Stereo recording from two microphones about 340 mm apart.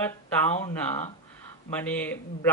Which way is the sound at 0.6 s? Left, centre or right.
Centre.